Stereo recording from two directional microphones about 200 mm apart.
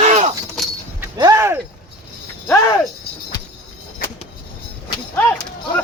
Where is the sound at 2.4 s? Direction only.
15° left (ahead or behind).